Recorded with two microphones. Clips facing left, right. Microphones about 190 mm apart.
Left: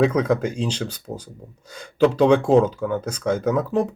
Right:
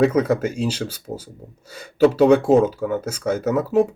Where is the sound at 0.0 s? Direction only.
5° right (ahead or behind).